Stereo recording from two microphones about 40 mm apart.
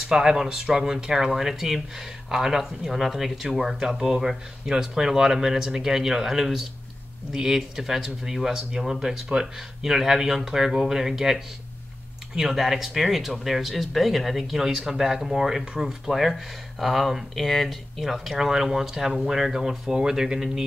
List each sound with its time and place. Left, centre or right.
0.0 s speech: centre